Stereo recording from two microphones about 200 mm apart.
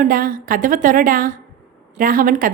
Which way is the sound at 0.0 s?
45° right (ahead or behind).